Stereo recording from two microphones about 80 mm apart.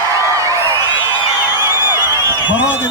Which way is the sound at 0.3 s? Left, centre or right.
Right.